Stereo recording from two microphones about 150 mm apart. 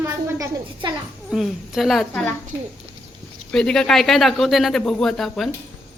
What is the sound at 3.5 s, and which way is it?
A man's voice, 5° left (ahead or behind).